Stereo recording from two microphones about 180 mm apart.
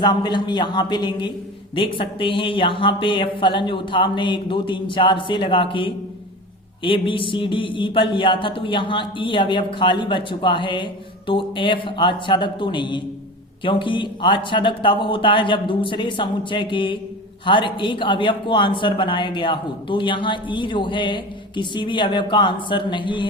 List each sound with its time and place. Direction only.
0.0 s speech: 25° left (ahead or behind)